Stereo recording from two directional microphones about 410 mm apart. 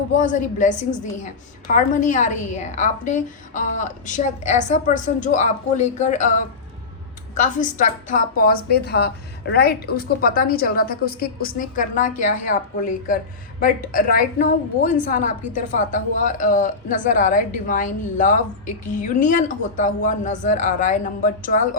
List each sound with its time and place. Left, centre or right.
0.2 s a woman's voice: centre
7.3 s speech: centre